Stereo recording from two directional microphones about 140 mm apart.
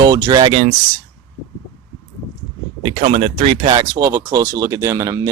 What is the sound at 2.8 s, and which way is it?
Speech, 50° right (ahead or behind).